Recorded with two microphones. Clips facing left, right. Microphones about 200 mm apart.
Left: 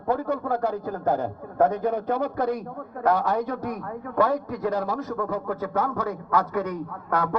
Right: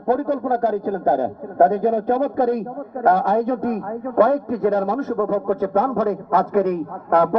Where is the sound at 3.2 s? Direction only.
25° right (ahead or behind).